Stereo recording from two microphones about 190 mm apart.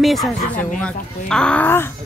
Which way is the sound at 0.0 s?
Centre (ahead or behind).